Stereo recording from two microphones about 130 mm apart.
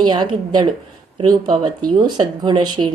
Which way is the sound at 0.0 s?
35° right (ahead or behind).